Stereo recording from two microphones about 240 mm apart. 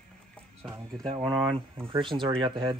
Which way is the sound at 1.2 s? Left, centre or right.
Centre.